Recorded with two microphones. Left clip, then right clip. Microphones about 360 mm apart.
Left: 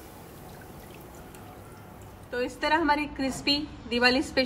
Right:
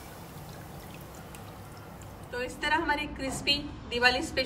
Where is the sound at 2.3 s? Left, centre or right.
Centre.